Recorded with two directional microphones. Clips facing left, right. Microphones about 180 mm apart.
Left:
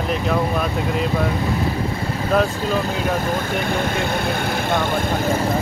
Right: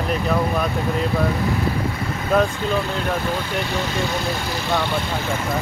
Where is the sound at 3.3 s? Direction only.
50° left (ahead or behind).